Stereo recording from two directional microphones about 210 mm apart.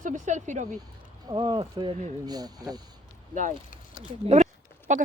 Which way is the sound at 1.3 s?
25° right (ahead or behind).